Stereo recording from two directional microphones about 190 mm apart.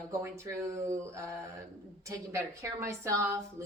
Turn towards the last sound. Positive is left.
turn(degrees=-15)  # may be behind; listen again after turning